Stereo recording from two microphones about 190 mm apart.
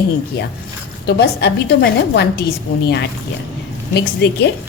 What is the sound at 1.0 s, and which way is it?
A woman's voice, 60° left (ahead or behind).